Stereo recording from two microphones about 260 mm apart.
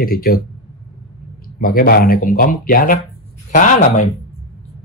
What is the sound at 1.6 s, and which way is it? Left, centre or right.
Speech, left.